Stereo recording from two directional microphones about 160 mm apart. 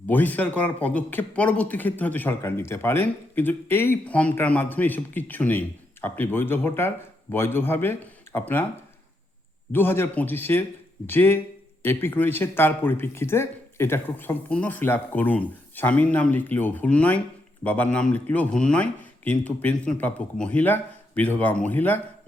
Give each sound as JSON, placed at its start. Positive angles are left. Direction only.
{"t": 0.1, "sound": "speech", "side_deg": 10}
{"t": 9.7, "sound": "speech", "side_deg": 15}